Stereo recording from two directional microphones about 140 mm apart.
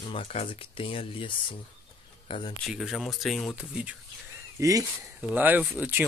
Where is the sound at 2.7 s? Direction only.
Centre (ahead or behind).